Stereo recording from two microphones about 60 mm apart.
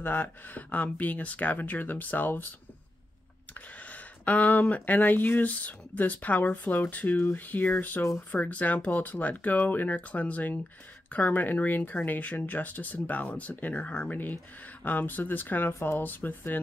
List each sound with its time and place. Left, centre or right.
0.0 s speech: left
3.5 s speech: left
14.8 s speech: left